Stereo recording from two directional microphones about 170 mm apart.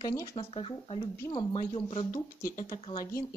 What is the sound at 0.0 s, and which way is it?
Speech, 20° left (ahead or behind).